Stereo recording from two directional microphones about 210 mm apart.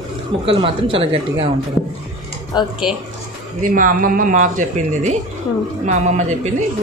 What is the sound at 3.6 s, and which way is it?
Speech, 40° right (ahead or behind).